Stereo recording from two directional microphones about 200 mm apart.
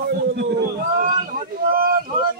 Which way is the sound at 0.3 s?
55° right (ahead or behind).